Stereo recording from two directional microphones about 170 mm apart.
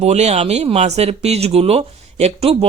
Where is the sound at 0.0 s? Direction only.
40° right (ahead or behind).